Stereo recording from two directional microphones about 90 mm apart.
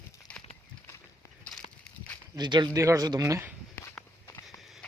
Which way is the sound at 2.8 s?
40° right (ahead or behind).